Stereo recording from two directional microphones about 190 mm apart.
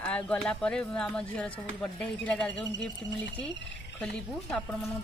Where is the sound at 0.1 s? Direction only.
5° left (ahead or behind).